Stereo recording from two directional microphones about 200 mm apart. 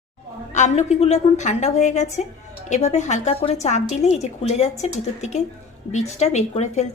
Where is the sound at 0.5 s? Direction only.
35° left (ahead or behind).